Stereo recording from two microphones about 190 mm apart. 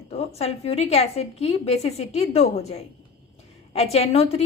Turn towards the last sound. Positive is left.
turn(degrees=30)  # may be behind; listen again after turning